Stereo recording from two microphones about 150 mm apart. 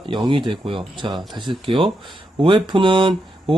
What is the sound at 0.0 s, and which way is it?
Speech, 30° right (ahead or behind).